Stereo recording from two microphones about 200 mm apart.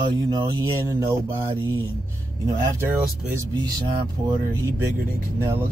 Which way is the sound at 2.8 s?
10° right (ahead or behind).